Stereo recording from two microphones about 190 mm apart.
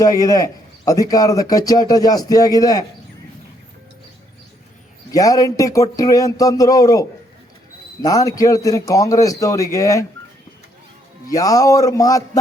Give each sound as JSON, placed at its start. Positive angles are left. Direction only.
{"t": 0.0, "sound": "a man's voice", "side_deg": 20}
{"t": 5.1, "sound": "a man's voice", "side_deg": 20}
{"t": 11.3, "sound": "a man's voice", "side_deg": 20}